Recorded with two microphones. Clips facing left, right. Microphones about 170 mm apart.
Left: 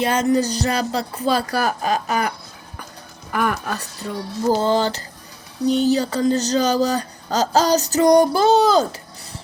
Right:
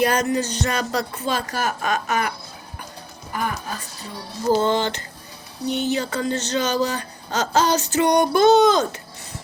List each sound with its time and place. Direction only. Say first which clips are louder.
0.0 s music: even; 25° left (ahead or behind)
0.3 s speech: left 4 dB; 35° left (ahead or behind)
3.3 s speech: left 5 dB; 70° left (ahead or behind)
4.6 s speech: left 2 dB; 35° left (ahead or behind)